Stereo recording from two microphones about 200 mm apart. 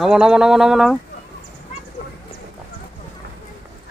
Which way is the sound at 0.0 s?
5° right (ahead or behind).